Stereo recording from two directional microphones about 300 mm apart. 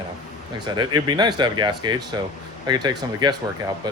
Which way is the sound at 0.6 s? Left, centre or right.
Centre.